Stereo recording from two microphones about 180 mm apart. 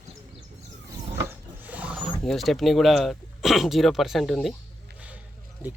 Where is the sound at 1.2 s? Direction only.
10° right (ahead or behind).